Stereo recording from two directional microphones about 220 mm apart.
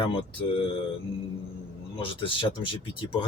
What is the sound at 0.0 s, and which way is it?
Speech, 25° left (ahead or behind).